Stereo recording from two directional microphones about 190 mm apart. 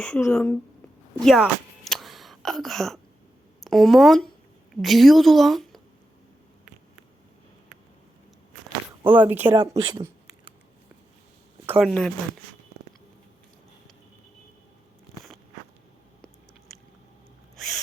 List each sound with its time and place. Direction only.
0.0 s a woman's voice: 5° left (ahead or behind)
1.2 s a sound: centre (ahead or behind)
3.6 s a woman's voice: centre (ahead or behind)
9.0 s speech: 10° right (ahead or behind)
9.5 s speech: 25° right (ahead or behind)
11.6 s a sound: 10° right (ahead or behind)
11.9 s a woman's voice: centre (ahead or behind)